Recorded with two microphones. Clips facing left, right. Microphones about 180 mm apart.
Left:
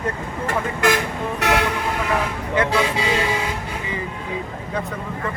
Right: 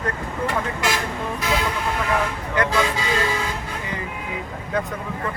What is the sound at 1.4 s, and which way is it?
Speech, 70° left (ahead or behind).